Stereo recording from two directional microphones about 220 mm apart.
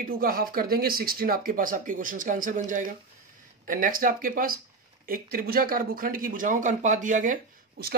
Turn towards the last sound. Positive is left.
turn(degrees=-40)  # may be behind; listen again after turning